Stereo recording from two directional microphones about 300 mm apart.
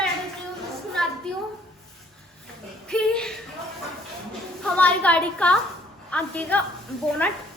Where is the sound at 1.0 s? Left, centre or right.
Centre.